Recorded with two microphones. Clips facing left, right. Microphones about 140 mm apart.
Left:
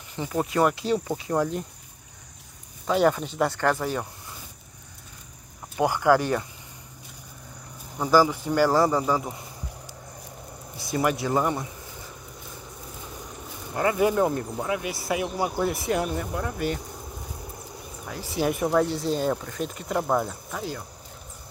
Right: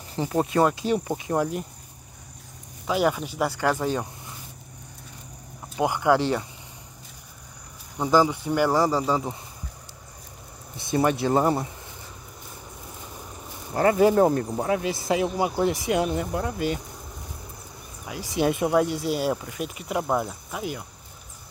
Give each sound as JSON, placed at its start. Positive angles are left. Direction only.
{"t": 0.1, "sound": "speech", "side_deg": -30}
{"t": 2.9, "sound": "speech", "side_deg": -5}
{"t": 5.8, "sound": "speech", "side_deg": -15}
{"t": 8.0, "sound": "speech", "side_deg": -20}
{"t": 10.8, "sound": "speech", "side_deg": -25}
{"t": 13.7, "sound": "speech", "side_deg": -30}
{"t": 18.0, "sound": "speech", "side_deg": -15}